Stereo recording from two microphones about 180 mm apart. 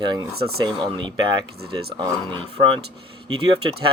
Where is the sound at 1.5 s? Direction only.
60° right (ahead or behind).